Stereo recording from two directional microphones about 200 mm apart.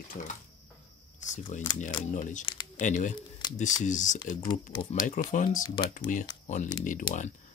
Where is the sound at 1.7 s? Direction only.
40° left (ahead or behind).